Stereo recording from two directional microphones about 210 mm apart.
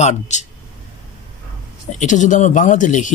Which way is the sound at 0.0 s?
35° left (ahead or behind).